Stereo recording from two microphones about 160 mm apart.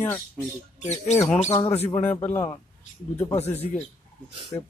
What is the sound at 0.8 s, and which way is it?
Speech, 45° left (ahead or behind).